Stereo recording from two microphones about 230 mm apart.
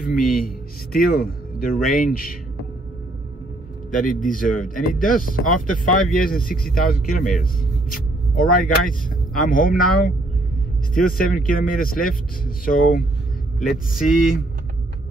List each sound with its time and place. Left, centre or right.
0.0 s speech: left
3.9 s speech: left
13.7 s speech: centre